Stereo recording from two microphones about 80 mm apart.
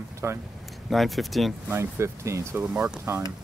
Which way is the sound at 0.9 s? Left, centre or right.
Centre.